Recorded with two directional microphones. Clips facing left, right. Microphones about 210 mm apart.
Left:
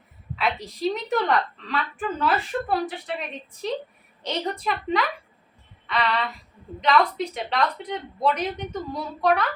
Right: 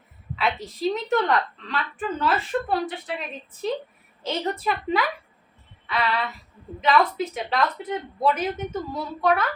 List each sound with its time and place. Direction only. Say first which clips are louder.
0.3 s a woman's voice: even; centre (ahead or behind)